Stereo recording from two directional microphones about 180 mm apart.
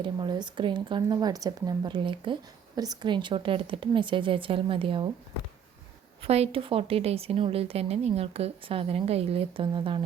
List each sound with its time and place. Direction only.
0.0 s speech: 25° right (ahead or behind)
6.2 s a woman's voice: 35° right (ahead or behind)